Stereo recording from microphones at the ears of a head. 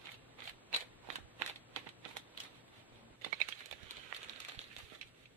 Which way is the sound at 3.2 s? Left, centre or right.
Right.